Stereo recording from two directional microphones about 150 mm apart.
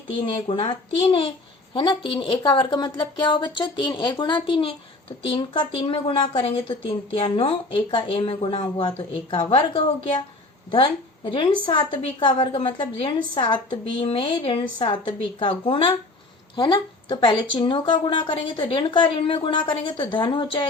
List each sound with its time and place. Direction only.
0.3 s a woman's voice: 35° left (ahead or behind)
1.7 s a woman's voice: 35° left (ahead or behind)